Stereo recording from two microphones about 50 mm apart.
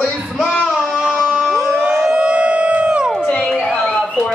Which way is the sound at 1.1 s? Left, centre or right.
Centre.